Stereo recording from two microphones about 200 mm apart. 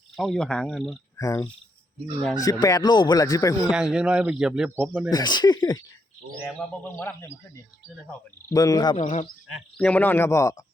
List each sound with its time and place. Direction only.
0.2 s speech: centre (ahead or behind)
1.1 s cricket: 15° left (ahead or behind)
2.4 s speech: 20° left (ahead or behind)
3.7 s speech: 5° right (ahead or behind)
5.1 s speech: 20° left (ahead or behind)
8.4 s speech: 15° left (ahead or behind)
9.0 s speech: 35° left (ahead or behind)
9.5 s speech: 5° left (ahead or behind)